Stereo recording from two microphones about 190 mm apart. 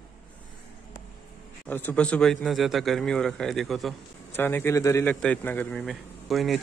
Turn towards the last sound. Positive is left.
turn(degrees=0)  # may be behind; listen again after turning